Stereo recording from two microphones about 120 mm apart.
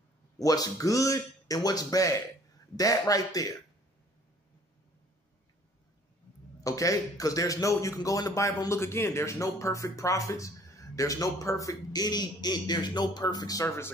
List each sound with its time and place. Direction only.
0.4 s a man's voice: 30° left (ahead or behind)
6.6 s a man's voice: 30° left (ahead or behind)